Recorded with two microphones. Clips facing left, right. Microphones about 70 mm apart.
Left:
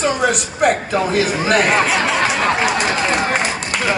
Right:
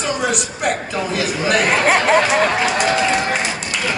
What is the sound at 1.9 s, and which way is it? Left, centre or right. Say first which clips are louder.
Speech: right 3 dB; right.